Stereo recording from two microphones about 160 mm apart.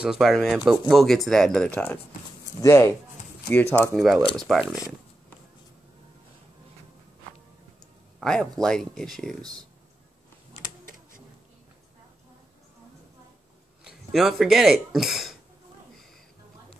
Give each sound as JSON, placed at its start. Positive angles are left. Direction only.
{"t": 0.0, "sound": "speech", "side_deg": 0}
{"t": 2.6, "sound": "speech", "side_deg": 15}
{"t": 3.9, "sound": "speech", "side_deg": 0}
{"t": 8.2, "sound": "speech", "side_deg": 5}
{"t": 9.4, "sound": "speech", "side_deg": -25}
{"t": 13.8, "sound": "speech", "side_deg": 0}